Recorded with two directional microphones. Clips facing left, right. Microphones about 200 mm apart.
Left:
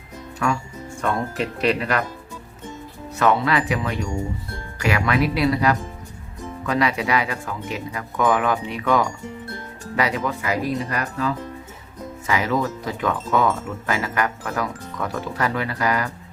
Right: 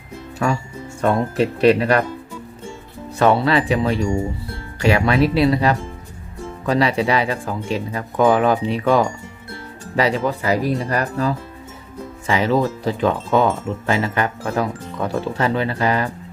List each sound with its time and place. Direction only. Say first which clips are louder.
1.0 s speech: right 6 dB; 35° right (ahead or behind)
3.2 s speech: right 4 dB; 30° right (ahead or behind)